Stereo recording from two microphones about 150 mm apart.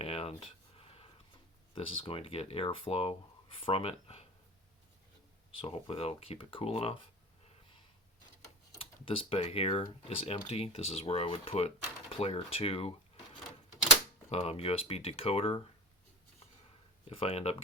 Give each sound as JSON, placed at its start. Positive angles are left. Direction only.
{"t": 0.0, "sound": "a sound", "side_deg": 40}
{"t": 1.7, "sound": "speech", "side_deg": 35}
{"t": 5.5, "sound": "speech", "side_deg": 40}
{"t": 8.8, "sound": "speech", "side_deg": 35}
{"t": 14.3, "sound": "speech", "side_deg": 45}
{"t": 17.1, "sound": "speech", "side_deg": 40}